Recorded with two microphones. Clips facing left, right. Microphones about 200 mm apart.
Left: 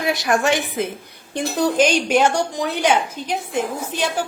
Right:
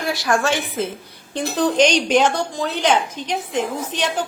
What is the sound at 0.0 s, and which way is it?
A woman's voice, 20° left (ahead or behind).